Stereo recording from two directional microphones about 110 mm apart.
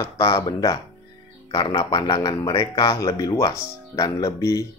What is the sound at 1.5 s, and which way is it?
Speech, 45° left (ahead or behind).